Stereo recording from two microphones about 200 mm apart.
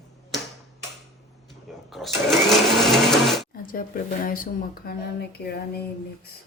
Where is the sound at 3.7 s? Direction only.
45° left (ahead or behind).